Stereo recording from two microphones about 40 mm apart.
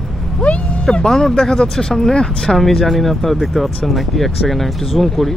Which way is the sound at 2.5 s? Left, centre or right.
Centre.